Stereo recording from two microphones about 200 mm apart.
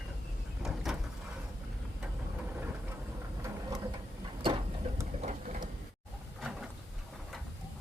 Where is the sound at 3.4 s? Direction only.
15° right (ahead or behind).